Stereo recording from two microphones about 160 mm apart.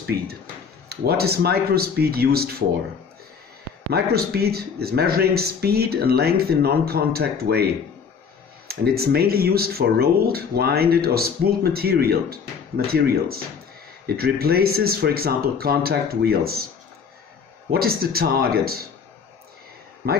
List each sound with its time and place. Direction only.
0.0 s speech: 75° right (ahead or behind)
3.9 s speech: 75° right (ahead or behind)
8.6 s speech: 75° right (ahead or behind)
17.6 s speech: 70° right (ahead or behind)
20.0 s speech: 65° right (ahead or behind)